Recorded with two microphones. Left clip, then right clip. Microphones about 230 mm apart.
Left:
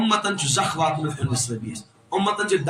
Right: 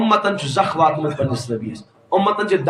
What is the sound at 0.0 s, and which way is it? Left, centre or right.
Speech, left.